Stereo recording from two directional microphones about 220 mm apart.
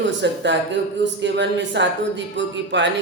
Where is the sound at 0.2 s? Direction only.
55° right (ahead or behind).